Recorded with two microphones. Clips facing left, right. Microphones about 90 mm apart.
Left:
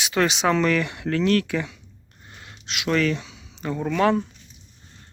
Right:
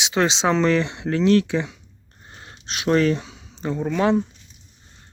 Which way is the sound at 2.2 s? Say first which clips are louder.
Right 2 dB; 30° right (ahead or behind).